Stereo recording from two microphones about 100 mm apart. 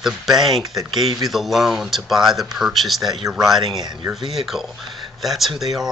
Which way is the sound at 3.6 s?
45° right (ahead or behind).